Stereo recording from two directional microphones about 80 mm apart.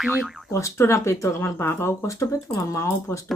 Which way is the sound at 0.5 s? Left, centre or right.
Left.